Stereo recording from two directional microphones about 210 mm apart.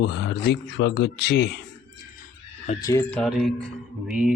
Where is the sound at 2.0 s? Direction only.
40° left (ahead or behind).